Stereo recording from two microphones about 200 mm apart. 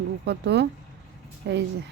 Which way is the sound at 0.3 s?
60° right (ahead or behind).